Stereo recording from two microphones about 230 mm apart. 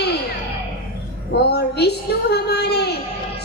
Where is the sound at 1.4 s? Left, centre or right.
Left.